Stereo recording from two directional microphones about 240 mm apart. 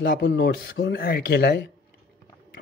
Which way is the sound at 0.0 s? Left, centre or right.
Left.